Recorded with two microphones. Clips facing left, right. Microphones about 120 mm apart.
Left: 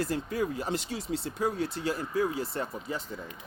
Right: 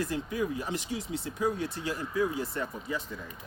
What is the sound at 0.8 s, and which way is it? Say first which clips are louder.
Speech: left 1 dB; 70° left (ahead or behind).